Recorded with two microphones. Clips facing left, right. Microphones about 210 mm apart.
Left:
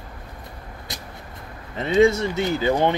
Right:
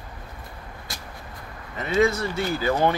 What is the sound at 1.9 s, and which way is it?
Speech, 25° left (ahead or behind).